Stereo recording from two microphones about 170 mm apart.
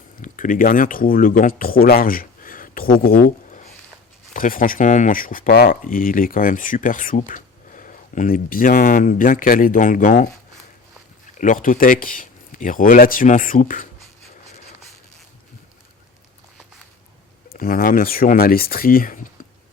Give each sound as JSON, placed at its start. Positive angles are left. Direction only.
{"t": 0.2, "sound": "speech", "side_deg": 50}
{"t": 11.3, "sound": "speech", "side_deg": 50}
{"t": 17.5, "sound": "speech", "side_deg": 60}